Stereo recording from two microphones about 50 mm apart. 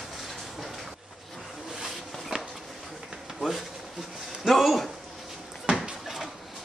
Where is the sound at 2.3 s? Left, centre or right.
Centre.